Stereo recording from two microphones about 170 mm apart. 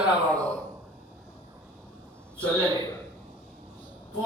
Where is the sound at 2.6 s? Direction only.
20° right (ahead or behind).